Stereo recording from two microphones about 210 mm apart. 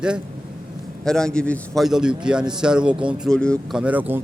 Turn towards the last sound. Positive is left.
turn(degrees=-5)  # may be behind; listen again after turning